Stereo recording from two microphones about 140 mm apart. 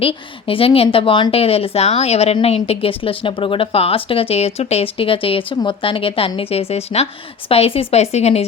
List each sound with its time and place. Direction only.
0.0 s a woman's voice: 40° left (ahead or behind)